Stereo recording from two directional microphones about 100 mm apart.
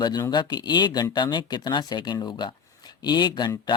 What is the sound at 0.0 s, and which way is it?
Speech, 45° left (ahead or behind).